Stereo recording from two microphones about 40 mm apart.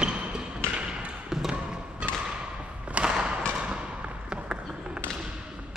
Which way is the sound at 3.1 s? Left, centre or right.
Centre.